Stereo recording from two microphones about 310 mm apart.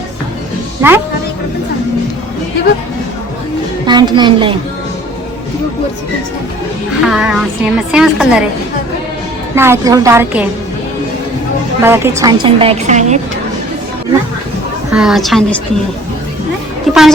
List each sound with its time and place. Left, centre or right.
0.8 s a woman's voice: centre
3.8 s a woman's voice: centre
7.1 s a woman's voice: centre
9.6 s a woman's voice: centre
11.8 s a woman's voice: centre
14.9 s a woman's voice: centre
16.9 s music: centre